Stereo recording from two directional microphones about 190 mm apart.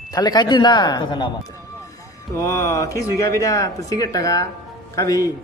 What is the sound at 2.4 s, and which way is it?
A man's voice, 15° left (ahead or behind).